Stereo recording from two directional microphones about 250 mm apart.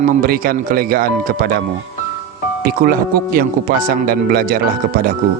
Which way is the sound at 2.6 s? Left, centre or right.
Right.